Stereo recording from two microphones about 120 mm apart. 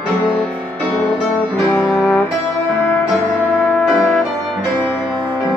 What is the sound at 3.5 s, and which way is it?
Music, 10° left (ahead or behind).